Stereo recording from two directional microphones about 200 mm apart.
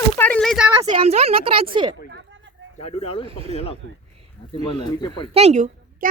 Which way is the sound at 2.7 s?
30° left (ahead or behind).